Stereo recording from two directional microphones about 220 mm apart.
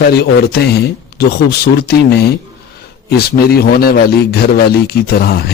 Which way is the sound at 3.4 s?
45° left (ahead or behind).